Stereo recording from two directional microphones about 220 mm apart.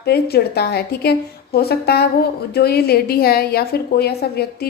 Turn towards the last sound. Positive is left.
turn(degrees=45)  # may be behind; listen again after turning